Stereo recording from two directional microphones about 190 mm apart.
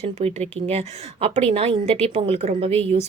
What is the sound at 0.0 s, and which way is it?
Speech, 35° right (ahead or behind).